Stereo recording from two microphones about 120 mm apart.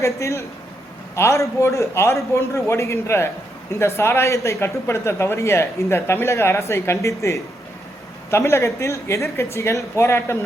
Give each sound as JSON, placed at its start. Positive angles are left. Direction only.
{"t": 0.0, "sound": "speech", "side_deg": 25}